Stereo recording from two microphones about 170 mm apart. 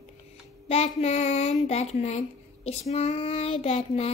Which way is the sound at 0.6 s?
40° left (ahead or behind).